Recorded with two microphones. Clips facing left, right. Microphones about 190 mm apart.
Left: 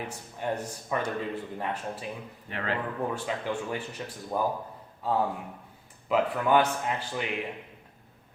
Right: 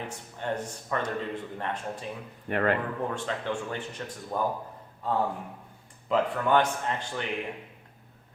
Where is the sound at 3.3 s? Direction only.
10° left (ahead or behind).